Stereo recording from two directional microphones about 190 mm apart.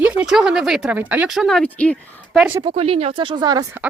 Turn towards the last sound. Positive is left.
turn(degrees=-20)  # may be behind; listen again after turning